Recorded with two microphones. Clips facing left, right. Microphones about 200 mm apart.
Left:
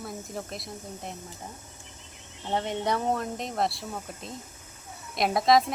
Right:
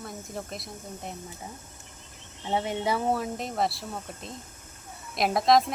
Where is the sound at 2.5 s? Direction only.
5° right (ahead or behind).